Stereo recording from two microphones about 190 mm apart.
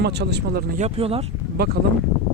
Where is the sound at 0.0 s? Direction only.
60° right (ahead or behind).